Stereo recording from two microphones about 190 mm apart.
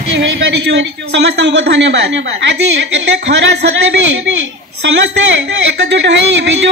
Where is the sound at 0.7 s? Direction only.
75° right (ahead or behind).